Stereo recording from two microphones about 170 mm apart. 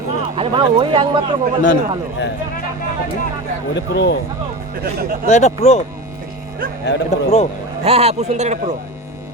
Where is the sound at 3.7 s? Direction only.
90° left.